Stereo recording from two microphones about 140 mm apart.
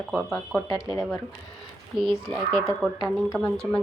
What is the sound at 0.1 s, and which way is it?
Speech, centre (ahead or behind).